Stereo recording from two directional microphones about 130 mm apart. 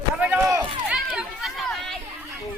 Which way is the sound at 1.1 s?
Centre (ahead or behind).